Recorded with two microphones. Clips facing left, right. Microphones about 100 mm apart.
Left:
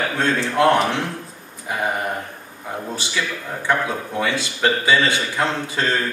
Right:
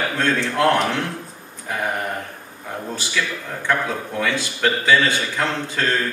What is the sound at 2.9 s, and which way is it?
A man's voice, 20° left (ahead or behind).